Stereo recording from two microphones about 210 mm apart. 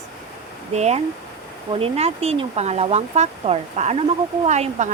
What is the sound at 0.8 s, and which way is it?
Speech, 30° right (ahead or behind).